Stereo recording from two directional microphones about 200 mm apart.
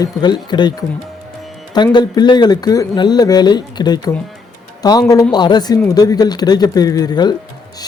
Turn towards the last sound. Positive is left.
turn(degrees=20)  # may be behind; listen again after turning